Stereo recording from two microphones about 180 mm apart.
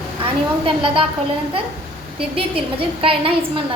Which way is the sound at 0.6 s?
30° right (ahead or behind).